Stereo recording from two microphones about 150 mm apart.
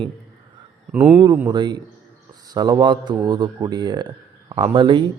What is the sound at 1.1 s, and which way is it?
A man's voice, 30° right (ahead or behind).